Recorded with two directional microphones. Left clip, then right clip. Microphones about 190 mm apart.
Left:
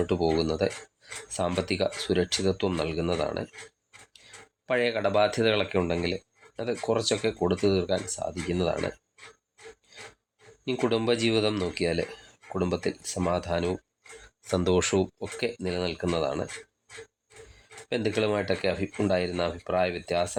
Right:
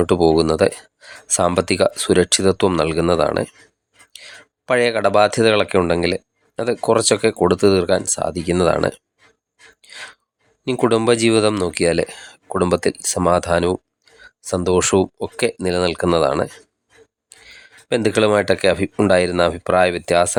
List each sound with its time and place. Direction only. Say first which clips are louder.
0.0 s speech: right 11 dB; 45° right (ahead or behind)
10.7 s speech: right 10 dB; 40° right (ahead or behind)
14.4 s speech: right 8 dB; 30° right (ahead or behind); by 20.3 s 45° right (ahead or behind)